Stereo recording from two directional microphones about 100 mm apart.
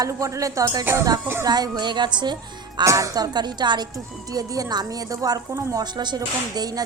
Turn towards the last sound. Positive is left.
turn(degrees=-40)  # may be behind; listen again after turning